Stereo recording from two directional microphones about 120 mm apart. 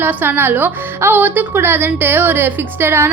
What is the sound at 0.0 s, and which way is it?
A woman's voice, 15° right (ahead or behind).